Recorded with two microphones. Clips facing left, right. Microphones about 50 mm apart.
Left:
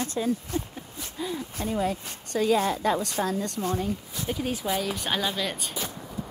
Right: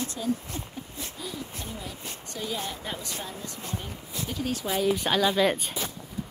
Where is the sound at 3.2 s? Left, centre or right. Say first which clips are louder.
Left 10 dB; left.